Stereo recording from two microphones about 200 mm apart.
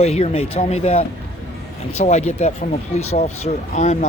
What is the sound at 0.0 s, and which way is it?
Speech, 30° left (ahead or behind).